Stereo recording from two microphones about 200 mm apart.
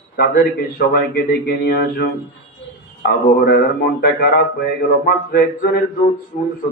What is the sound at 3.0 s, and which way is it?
Speech, 50° left (ahead or behind).